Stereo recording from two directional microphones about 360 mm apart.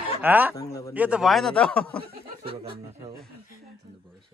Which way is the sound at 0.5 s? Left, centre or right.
Centre.